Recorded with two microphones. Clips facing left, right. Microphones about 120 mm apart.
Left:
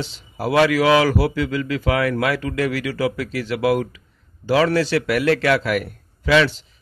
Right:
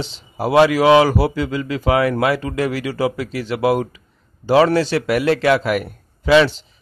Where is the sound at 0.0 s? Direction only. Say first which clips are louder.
Right 2 dB; 25° right (ahead or behind).